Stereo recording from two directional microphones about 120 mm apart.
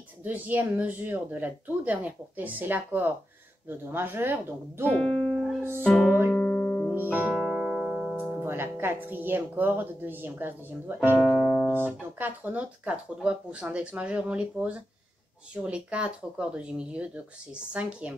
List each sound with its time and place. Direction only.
0.2 s speech: 15° right (ahead or behind)
4.8 s speech: 5° left (ahead or behind)
5.6 s music: 20° right (ahead or behind)
5.9 s music: 5° left (ahead or behind)
6.9 s speech: 15° right (ahead or behind)
11.1 s speech: 5° left (ahead or behind)
11.7 s speech: 15° right (ahead or behind)